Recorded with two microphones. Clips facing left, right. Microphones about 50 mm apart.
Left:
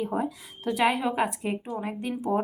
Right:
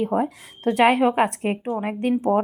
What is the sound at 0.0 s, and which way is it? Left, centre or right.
Speech, right.